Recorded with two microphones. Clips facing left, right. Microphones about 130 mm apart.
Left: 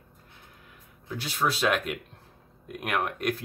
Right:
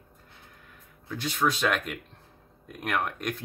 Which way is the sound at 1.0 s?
5° left (ahead or behind).